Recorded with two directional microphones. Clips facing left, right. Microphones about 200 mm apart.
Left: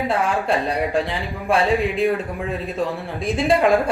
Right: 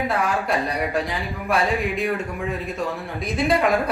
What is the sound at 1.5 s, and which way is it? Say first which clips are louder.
Speech: left 3 dB; 30° left (ahead or behind).